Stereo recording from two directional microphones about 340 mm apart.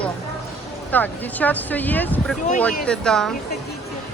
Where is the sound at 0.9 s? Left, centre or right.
Centre.